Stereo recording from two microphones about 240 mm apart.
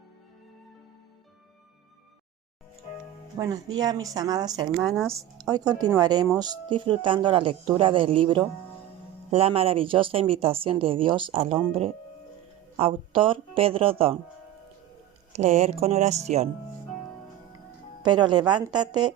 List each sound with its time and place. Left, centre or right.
3.3 s a woman's voice: centre
4.9 s speech: centre
5.1 s a woman's voice: centre
15.3 s speech: right
18.0 s a woman's voice: centre